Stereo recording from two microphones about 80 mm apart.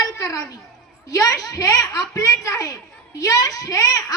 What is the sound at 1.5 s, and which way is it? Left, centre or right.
A woman's voice, left.